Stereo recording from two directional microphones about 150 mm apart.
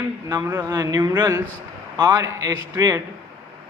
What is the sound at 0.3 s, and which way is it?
Speech, 20° right (ahead or behind).